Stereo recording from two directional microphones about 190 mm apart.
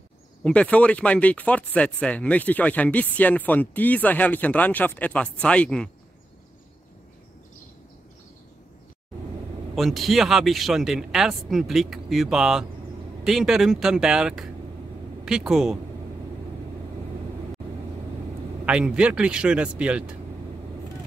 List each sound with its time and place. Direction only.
0.4 s speech: 5° left (ahead or behind)
9.8 s speech: centre (ahead or behind)
18.7 s speech: 5° right (ahead or behind)